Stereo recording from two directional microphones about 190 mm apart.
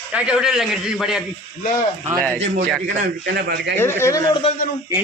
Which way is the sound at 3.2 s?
60° right (ahead or behind).